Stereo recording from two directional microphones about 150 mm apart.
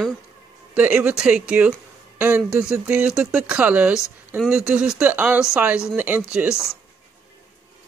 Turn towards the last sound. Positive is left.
turn(degrees=20)  # may be behind; listen again after turning